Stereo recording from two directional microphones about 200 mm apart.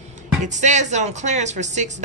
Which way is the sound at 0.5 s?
35° right (ahead or behind).